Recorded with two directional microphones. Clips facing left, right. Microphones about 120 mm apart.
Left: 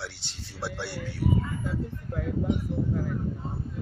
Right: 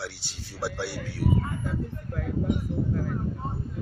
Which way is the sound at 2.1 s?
20° left (ahead or behind).